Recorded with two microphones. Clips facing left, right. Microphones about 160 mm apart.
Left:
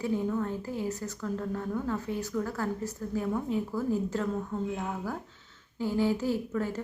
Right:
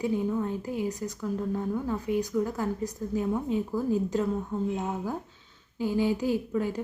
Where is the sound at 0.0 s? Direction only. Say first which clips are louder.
Right 2 dB; 15° right (ahead or behind).